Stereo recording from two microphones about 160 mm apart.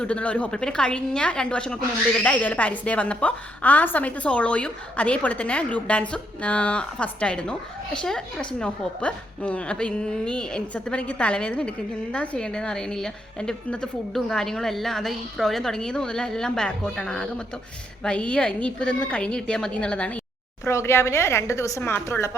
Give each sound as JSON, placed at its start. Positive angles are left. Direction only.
{"t": 0.0, "sound": "a woman's voice", "side_deg": 10}